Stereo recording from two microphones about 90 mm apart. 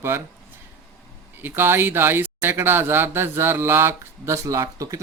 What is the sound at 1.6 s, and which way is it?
Speech, 25° right (ahead or behind).